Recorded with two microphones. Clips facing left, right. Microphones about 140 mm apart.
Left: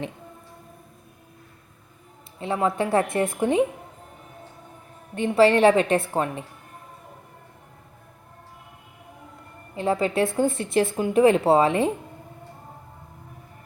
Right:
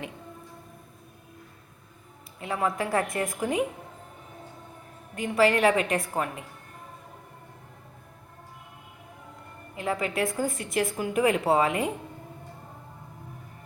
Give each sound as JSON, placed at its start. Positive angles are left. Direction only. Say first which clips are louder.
{"t": 2.4, "sound": "speech", "louder": "left 4 dB", "side_deg": 25}
{"t": 5.1, "sound": "speech", "louder": "left 5 dB", "side_deg": 30}
{"t": 9.7, "sound": "speech", "louder": "left 6 dB", "side_deg": 30}